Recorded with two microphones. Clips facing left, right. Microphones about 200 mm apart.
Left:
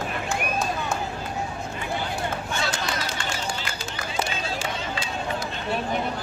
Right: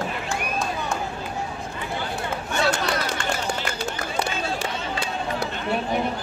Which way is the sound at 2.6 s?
60° right (ahead or behind).